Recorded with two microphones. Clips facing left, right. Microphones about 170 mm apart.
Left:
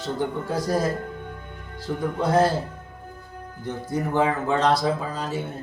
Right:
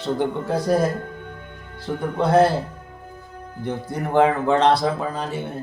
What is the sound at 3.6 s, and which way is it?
Speech, 60° right (ahead or behind).